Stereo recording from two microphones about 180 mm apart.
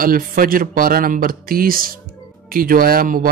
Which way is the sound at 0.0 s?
50° right (ahead or behind).